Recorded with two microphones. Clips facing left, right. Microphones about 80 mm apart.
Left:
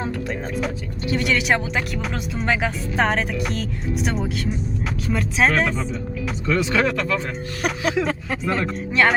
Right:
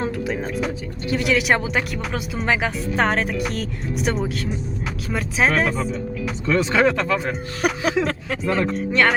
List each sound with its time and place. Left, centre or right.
0.0 s speech: centre
6.5 s speech: right
8.0 s speech: centre